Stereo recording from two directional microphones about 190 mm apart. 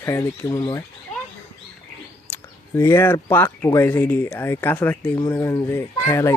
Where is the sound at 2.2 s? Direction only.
10° left (ahead or behind).